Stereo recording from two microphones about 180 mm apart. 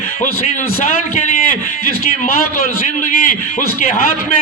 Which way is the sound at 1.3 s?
45° left (ahead or behind).